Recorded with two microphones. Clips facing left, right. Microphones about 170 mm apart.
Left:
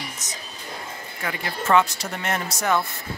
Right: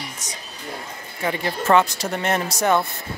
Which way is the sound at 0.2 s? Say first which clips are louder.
Right 2 dB; 10° right (ahead or behind).